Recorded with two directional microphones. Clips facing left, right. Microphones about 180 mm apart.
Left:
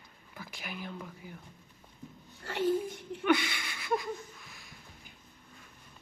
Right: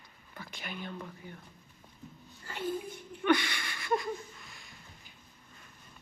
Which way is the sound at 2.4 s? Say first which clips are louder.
Left 6 dB; 80° left.